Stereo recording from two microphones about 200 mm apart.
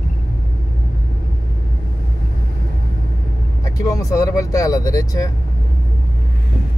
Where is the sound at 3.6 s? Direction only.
15° left (ahead or behind).